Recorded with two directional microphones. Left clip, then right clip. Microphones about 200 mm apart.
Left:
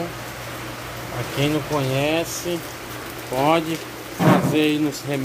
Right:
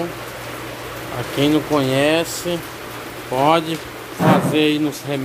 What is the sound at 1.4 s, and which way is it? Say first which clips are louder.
Speech: right 6 dB; 20° right (ahead or behind).